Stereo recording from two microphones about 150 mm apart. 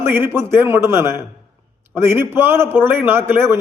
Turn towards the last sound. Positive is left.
turn(degrees=-15)  # may be behind; listen again after turning